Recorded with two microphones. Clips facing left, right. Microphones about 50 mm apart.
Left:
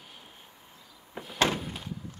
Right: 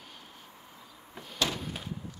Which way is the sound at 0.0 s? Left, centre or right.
Centre.